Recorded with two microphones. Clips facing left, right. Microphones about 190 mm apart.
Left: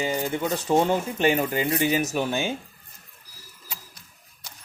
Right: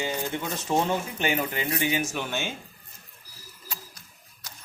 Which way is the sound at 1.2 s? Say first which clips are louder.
Left 5 dB; 35° left (ahead or behind).